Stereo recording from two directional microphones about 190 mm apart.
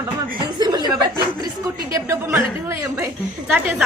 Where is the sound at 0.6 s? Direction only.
20° right (ahead or behind).